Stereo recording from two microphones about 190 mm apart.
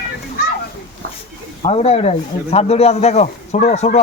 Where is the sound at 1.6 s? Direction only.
35° left (ahead or behind).